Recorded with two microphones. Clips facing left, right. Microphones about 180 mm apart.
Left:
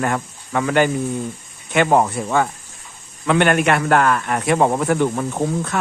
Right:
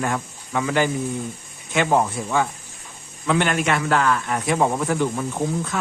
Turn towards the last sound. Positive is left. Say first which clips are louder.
# left 3 dB
turn(degrees=60)  # may be behind; listen again after turning